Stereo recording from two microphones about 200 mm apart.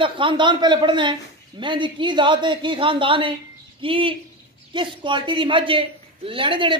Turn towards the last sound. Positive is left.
turn(degrees=-25)  # may be behind; listen again after turning